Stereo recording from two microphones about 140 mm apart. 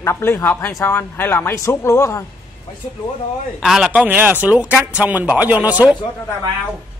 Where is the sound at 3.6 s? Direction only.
5° right (ahead or behind).